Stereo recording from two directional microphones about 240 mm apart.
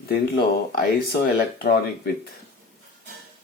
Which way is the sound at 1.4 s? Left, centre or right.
Left.